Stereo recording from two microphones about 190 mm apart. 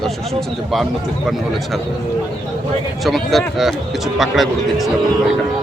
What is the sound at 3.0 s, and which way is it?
Speech, centre (ahead or behind).